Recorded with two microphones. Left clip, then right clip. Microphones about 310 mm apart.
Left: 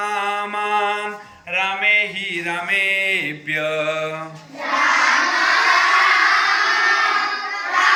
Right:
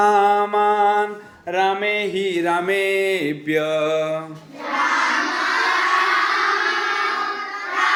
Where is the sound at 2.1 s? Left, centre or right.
Right.